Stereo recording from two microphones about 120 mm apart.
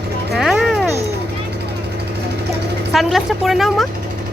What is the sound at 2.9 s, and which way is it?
A woman's voice, centre (ahead or behind).